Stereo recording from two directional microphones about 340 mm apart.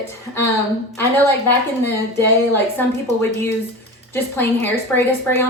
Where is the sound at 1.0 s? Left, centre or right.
Centre.